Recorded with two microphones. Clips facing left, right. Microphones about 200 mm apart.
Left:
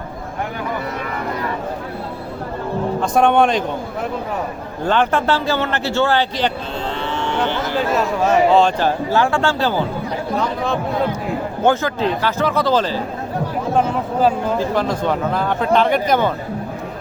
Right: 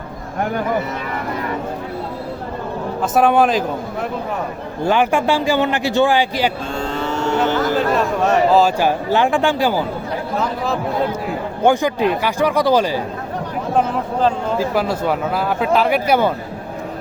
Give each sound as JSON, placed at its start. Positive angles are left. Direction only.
{"t": 3.0, "sound": "speech", "side_deg": -5}
{"t": 4.9, "sound": "speech", "side_deg": -10}
{"t": 6.8, "sound": "a sound", "side_deg": -40}
{"t": 7.8, "sound": "speech", "side_deg": 0}
{"t": 10.3, "sound": "speech", "side_deg": 0}
{"t": 11.6, "sound": "speech", "side_deg": -15}
{"t": 13.7, "sound": "speech", "side_deg": 5}
{"t": 14.6, "sound": "speech", "side_deg": -10}